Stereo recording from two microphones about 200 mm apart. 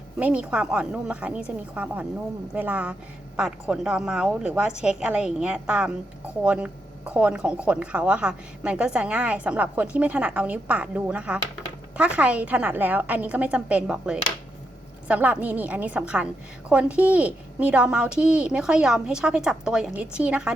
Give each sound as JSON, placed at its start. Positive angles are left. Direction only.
{"t": 0.2, "sound": "a woman's voice", "side_deg": -5}